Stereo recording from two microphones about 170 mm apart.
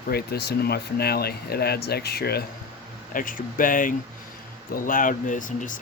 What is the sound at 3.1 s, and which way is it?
Speech, 55° left (ahead or behind).